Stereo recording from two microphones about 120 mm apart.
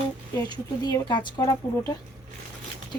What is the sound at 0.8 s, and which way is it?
Speech, 35° left (ahead or behind).